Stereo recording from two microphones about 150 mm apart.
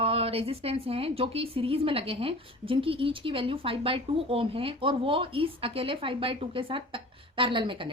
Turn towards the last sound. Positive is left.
turn(degrees=-35)  # may be behind; listen again after turning